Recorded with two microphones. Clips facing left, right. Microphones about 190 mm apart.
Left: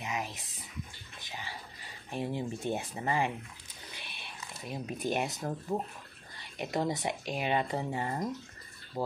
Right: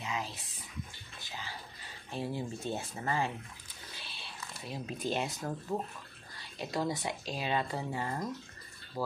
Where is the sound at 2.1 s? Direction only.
20° left (ahead or behind).